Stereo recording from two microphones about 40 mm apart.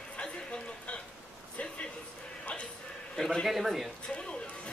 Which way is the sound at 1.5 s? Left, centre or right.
Left.